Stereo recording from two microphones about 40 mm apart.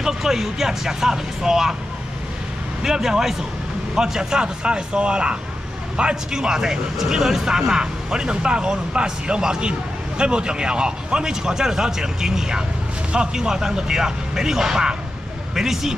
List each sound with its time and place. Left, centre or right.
0.0 s speech: centre
2.8 s speech: centre